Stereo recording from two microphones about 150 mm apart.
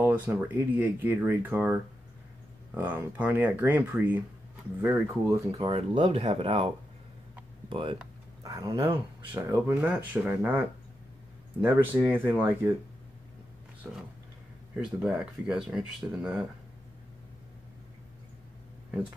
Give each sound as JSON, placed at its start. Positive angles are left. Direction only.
{"t": 0.0, "sound": "speech", "side_deg": -10}
{"t": 5.6, "sound": "speech", "side_deg": -35}
{"t": 5.9, "sound": "speech", "side_deg": -50}
{"t": 8.4, "sound": "speech", "side_deg": -25}
{"t": 13.9, "sound": "speech", "side_deg": -5}